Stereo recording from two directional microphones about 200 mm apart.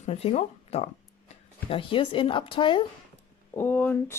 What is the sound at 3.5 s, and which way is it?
Speech, 10° left (ahead or behind).